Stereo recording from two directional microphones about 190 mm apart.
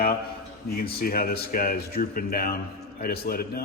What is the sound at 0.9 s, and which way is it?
A man's voice, 50° left (ahead or behind).